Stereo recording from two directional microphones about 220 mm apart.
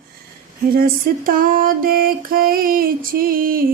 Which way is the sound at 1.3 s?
40° right (ahead or behind).